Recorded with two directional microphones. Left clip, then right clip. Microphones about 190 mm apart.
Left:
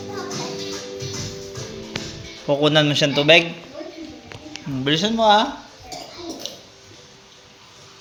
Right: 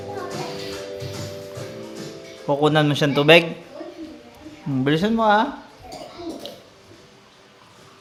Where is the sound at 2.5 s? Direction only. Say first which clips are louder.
Left 1 dB; 15° right (ahead or behind).